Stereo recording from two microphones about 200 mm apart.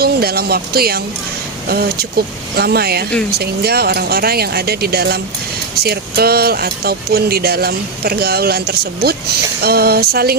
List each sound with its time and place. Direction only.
0.0 s speech: 50° right (ahead or behind)